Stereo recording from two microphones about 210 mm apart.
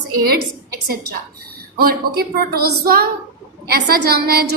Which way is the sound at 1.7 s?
45° right (ahead or behind).